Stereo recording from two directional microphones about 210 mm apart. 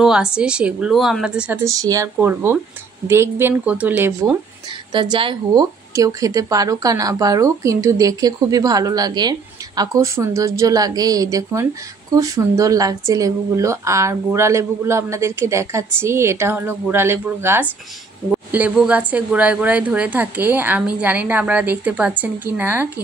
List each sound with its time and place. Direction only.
0.0 s speech: 5° right (ahead or behind)
4.9 s speech: 20° right (ahead or behind)